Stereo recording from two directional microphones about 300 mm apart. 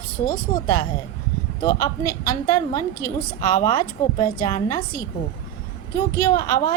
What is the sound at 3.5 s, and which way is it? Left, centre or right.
A woman's voice, centre.